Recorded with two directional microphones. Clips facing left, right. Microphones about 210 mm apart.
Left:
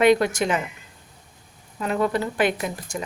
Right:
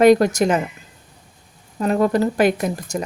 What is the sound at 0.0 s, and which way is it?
Speech, 40° right (ahead or behind).